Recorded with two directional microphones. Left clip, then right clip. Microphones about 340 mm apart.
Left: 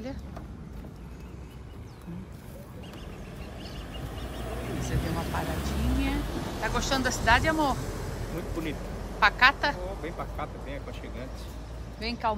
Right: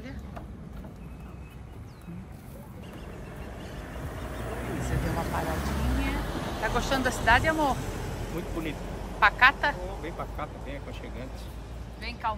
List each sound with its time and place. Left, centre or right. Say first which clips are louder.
3.9 s vehicle: right 2 dB; centre
6.6 s speech: right 1 dB; centre
7.7 s a sound: right 1 dB; right
9.2 s speech: right 1 dB; centre